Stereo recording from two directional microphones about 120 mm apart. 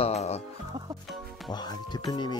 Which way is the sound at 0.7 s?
35° right (ahead or behind).